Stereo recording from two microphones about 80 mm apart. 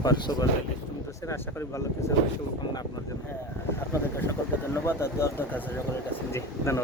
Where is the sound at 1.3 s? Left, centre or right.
Left.